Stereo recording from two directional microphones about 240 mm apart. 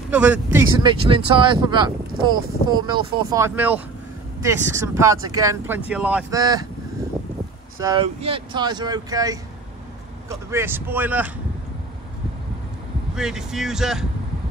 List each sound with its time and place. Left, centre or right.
0.1 s speech: centre
6.4 s speech: centre
7.8 s speech: right
10.5 s speech: centre
13.1 s speech: centre